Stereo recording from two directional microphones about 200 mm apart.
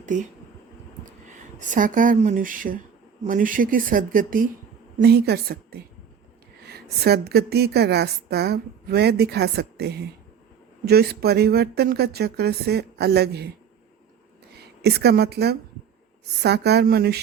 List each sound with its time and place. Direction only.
0.0 s a woman's voice: 40° right (ahead or behind); by 5.8 s 55° right (ahead or behind)
7.0 s a woman's voice: 50° right (ahead or behind)
14.6 s a woman's voice: 55° right (ahead or behind)